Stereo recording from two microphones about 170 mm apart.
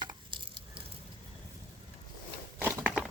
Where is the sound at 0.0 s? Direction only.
30° right (ahead or behind).